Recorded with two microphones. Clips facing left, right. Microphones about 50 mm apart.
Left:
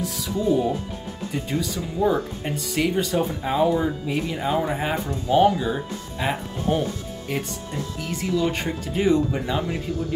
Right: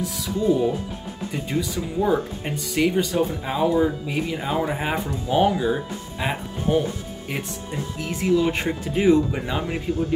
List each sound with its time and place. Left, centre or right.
0.0 s speech: centre
9.9 s speech: right